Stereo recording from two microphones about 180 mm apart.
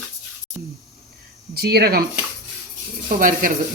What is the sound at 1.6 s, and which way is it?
Speech, 60° right (ahead or behind).